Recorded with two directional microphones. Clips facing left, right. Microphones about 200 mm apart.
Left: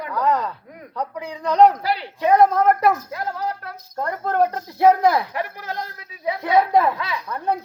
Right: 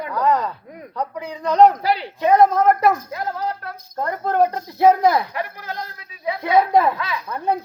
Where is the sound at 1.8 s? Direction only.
15° right (ahead or behind).